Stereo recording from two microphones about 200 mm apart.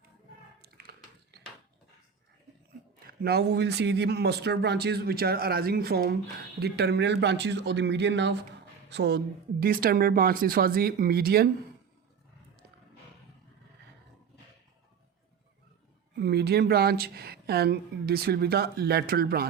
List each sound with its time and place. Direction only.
0.6 s biting: 50° right (ahead or behind)
3.1 s a woman's voice: 50° right (ahead or behind)
16.1 s a woman's voice: 55° right (ahead or behind)